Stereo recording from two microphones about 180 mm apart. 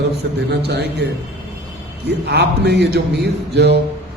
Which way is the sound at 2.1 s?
70° right (ahead or behind).